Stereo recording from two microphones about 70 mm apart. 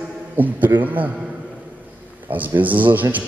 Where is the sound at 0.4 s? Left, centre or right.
Right.